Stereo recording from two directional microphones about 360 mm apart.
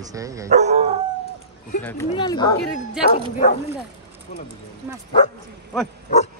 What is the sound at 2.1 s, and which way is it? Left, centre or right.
Speech, centre.